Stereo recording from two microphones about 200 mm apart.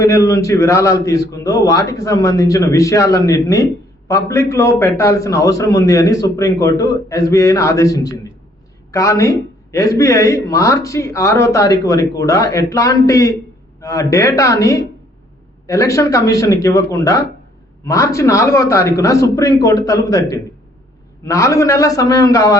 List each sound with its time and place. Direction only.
0.0 s speech: 15° left (ahead or behind)